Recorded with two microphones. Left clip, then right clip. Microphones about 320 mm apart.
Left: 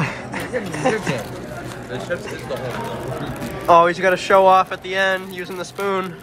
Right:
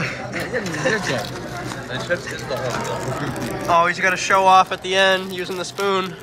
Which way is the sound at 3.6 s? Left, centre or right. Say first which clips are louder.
Left 4 dB; centre.